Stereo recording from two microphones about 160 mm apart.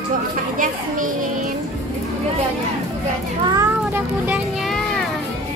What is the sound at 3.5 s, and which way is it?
Speech, 15° right (ahead or behind).